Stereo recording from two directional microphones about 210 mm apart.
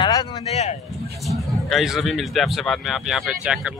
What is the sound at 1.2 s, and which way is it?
Speech, centre (ahead or behind).